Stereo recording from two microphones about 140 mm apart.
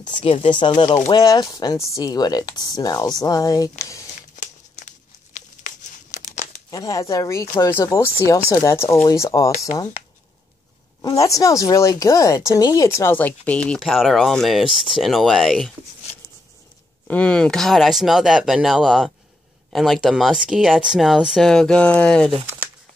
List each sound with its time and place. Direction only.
0.0 s speech: 40° left (ahead or behind)
4.4 s crumpling: 60° left (ahead or behind)
6.7 s speech: 25° left (ahead or behind)
11.0 s speech: 25° left (ahead or behind); by 15.7 s centre (ahead or behind)
17.1 s speech: 5° left (ahead or behind)